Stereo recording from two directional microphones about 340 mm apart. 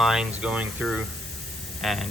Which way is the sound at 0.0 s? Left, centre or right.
Centre.